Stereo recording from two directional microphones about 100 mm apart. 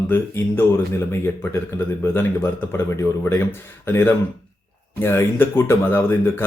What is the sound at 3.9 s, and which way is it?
Speech, 20° left (ahead or behind).